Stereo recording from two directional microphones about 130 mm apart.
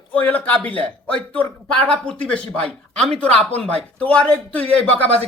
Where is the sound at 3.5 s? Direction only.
50° right (ahead or behind).